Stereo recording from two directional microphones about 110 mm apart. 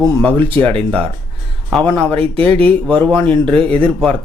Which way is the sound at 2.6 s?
10° left (ahead or behind).